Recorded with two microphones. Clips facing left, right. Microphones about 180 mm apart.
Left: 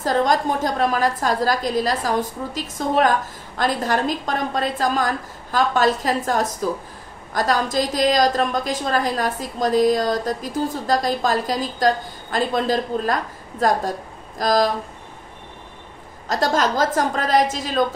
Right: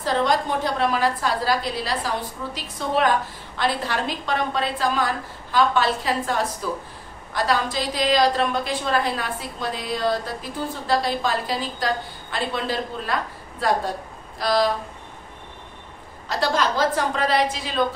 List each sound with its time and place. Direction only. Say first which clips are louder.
0.0 s a woman's voice: left 3 dB; 45° left (ahead or behind)
16.3 s a woman's voice: left 3 dB; 45° left (ahead or behind)